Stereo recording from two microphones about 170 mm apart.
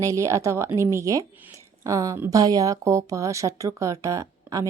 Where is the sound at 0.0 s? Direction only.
15° right (ahead or behind).